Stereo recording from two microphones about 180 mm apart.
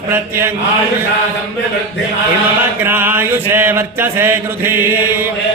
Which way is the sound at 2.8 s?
10° right (ahead or behind).